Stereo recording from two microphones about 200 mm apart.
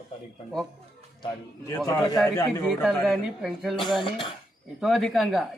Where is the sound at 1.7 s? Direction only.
15° left (ahead or behind).